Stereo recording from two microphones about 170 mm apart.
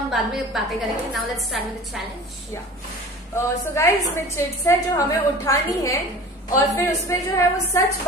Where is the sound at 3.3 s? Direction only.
15° left (ahead or behind).